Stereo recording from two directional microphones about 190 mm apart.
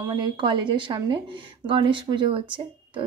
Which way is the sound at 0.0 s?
25° right (ahead or behind).